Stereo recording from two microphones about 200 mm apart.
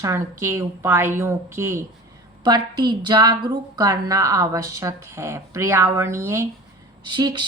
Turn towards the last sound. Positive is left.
turn(degrees=-20)  # may be behind; listen again after turning